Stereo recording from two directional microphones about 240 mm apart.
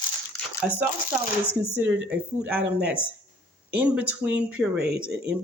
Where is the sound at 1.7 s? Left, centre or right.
Centre.